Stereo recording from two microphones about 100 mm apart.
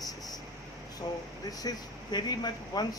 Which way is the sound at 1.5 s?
40° left (ahead or behind).